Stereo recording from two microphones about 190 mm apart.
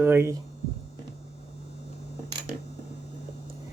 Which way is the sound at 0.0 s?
10° right (ahead or behind).